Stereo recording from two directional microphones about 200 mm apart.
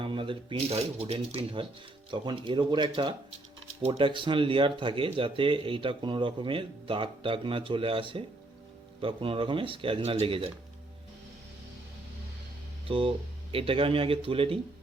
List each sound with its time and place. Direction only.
0.0 s speech: 25° right (ahead or behind)
12.9 s speech: 25° right (ahead or behind)